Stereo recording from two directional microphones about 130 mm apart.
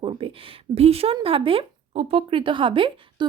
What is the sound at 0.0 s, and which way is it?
Speech, 45° right (ahead or behind).